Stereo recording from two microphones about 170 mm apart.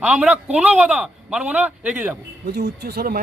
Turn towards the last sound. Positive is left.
turn(degrees=-65)  # may be behind; listen again after turning